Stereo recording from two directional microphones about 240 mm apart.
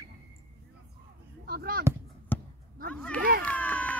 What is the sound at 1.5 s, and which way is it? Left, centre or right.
Speech, right.